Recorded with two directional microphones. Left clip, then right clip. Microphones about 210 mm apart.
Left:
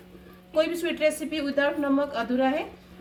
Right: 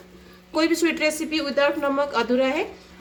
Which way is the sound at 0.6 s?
50° right (ahead or behind).